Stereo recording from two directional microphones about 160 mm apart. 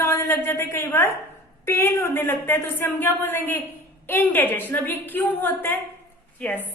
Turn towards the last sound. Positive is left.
turn(degrees=10)  # may be behind; listen again after turning